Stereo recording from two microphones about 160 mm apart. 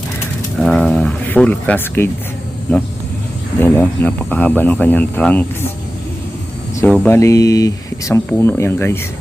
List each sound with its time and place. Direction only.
0.6 s a sound: 5° left (ahead or behind)
3.6 s speech: 10° left (ahead or behind)
6.7 s speech: 10° left (ahead or behind)
7.2 s speech: 20° left (ahead or behind)